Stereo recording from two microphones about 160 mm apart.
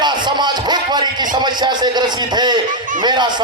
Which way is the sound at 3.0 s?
30° right (ahead or behind).